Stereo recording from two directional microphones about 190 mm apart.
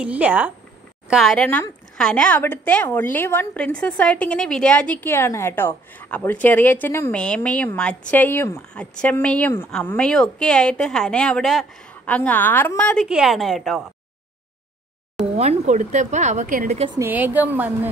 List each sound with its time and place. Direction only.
0.0 s a woman's voice: 5° right (ahead or behind)
15.3 s a woman's voice: 35° right (ahead or behind)
17.0 s a woman's voice: 10° right (ahead or behind)